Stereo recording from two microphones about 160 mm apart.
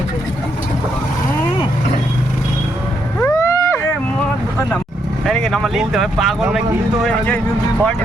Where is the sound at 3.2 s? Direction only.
15° left (ahead or behind).